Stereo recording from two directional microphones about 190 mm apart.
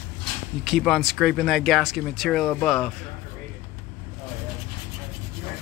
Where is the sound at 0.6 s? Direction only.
Centre (ahead or behind).